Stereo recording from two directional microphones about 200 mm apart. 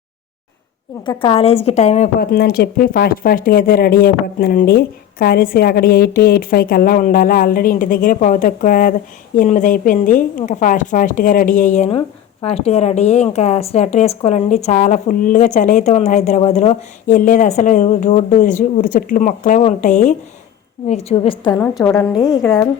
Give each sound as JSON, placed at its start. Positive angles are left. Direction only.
{"t": 1.0, "sound": "a woman's voice", "side_deg": 25}
{"t": 2.1, "sound": "a woman's voice", "side_deg": 50}
{"t": 21.5, "sound": "a woman's voice", "side_deg": 5}